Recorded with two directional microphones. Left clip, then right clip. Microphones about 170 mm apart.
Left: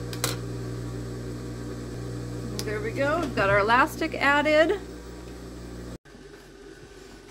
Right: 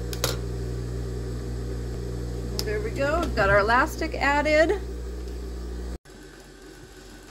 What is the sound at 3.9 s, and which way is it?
Speech, 10° left (ahead or behind).